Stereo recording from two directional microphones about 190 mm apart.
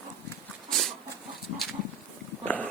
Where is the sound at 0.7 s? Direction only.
Centre (ahead or behind).